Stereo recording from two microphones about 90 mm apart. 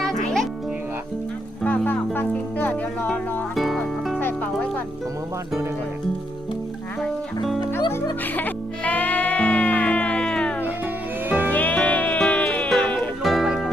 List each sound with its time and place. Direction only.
0.0 s music: 5° left (ahead or behind)
1.6 s music: 20° left (ahead or behind)
3.5 s music: centre (ahead or behind)
4.2 s music: 20° left (ahead or behind)
8.2 s music: 20° left (ahead or behind)
11.3 s music: 20° right (ahead or behind)
11.5 s music: 15° left (ahead or behind)
13.2 s music: centre (ahead or behind)